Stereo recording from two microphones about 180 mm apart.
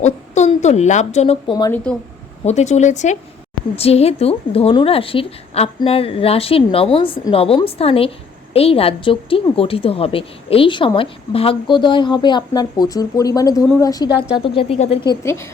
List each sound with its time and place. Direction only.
0.0 s a woman's voice: 40° left (ahead or behind)
1.7 s speech: 5° left (ahead or behind)
2.4 s a woman's voice: 40° left (ahead or behind); by 15.4 s 15° left (ahead or behind)